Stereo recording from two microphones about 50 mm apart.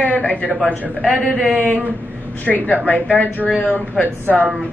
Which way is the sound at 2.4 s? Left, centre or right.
Left.